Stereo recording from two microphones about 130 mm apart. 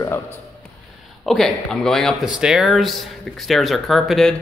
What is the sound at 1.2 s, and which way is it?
Speech, centre (ahead or behind).